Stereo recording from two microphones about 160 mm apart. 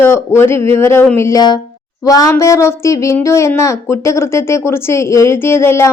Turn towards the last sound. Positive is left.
turn(degrees=15)  # may be behind; listen again after turning